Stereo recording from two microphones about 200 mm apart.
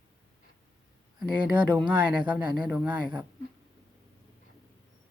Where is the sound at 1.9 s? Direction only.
5° right (ahead or behind).